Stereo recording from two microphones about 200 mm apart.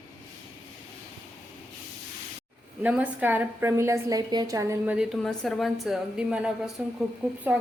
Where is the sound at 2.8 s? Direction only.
5° right (ahead or behind).